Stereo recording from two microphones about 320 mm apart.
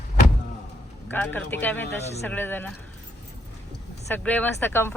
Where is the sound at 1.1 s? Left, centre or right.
Centre.